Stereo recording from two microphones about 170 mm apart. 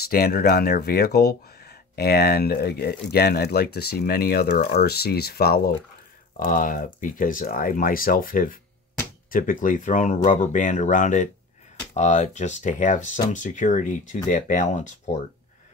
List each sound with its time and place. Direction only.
0.1 s speech: 65° left (ahead or behind)
6.3 s speech: 55° left (ahead or behind)